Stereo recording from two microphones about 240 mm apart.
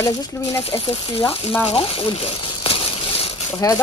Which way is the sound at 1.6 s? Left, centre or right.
Left.